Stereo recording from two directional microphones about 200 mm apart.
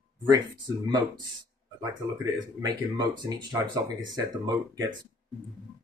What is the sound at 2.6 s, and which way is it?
Speech, 20° right (ahead or behind).